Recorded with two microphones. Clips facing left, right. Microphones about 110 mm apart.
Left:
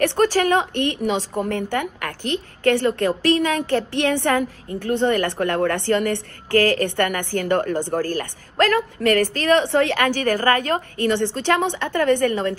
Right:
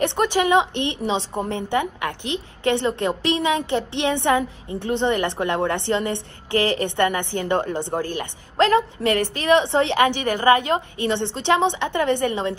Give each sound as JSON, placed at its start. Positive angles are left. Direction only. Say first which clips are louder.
{"t": 0.0, "sound": "a woman's voice", "louder": "left 2 dB", "side_deg": -20}